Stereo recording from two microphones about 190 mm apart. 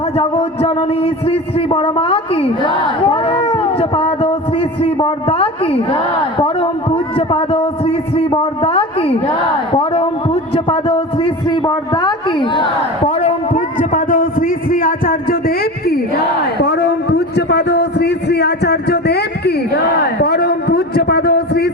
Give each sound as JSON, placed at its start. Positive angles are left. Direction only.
{"t": 0.2, "sound": "a man's voice", "side_deg": 30}
{"t": 13.1, "sound": "a man's voice", "side_deg": 40}
{"t": 20.2, "sound": "a sound", "side_deg": 55}